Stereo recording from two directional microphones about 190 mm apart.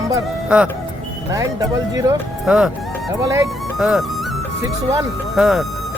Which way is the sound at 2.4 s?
5° right (ahead or behind).